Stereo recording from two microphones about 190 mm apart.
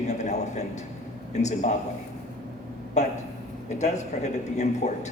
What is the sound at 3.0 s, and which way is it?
A man's voice, 35° left (ahead or behind).